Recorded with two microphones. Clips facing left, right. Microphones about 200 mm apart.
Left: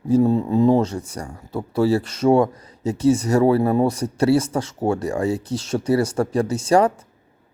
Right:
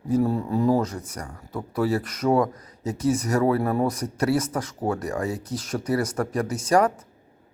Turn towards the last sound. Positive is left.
turn(degrees=30)  # may be behind; listen again after turning